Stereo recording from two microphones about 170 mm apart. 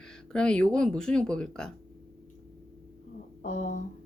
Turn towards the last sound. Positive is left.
turn(degrees=45)  # may be behind; listen again after turning